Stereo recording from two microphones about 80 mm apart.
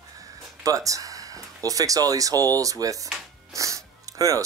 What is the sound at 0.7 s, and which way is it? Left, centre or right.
Speech, right.